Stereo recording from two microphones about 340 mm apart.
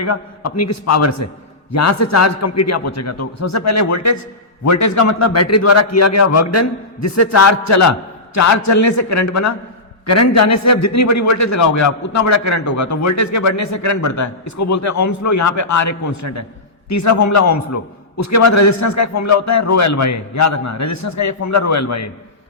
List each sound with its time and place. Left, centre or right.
0.0 s a man's voice: left